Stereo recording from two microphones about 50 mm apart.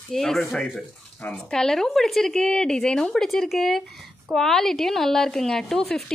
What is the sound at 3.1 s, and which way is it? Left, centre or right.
Speech, centre.